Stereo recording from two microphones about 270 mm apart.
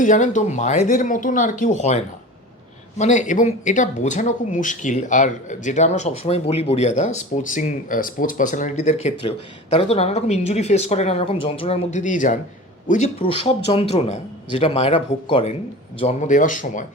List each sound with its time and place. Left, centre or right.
0.0 s speech: left
3.0 s speech: left